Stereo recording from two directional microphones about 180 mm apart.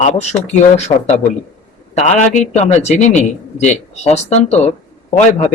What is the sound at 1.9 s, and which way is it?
A man's voice, 40° left (ahead or behind).